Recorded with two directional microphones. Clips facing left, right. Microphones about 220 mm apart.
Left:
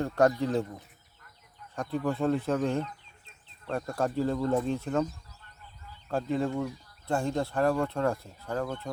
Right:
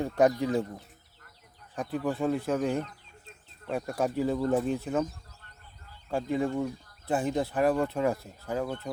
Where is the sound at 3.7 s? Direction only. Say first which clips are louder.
Right 1 dB; 15° right (ahead or behind).